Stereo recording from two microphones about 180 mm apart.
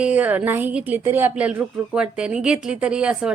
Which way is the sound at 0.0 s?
10° right (ahead or behind).